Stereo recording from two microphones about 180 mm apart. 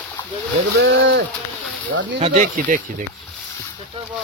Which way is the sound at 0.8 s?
80° right.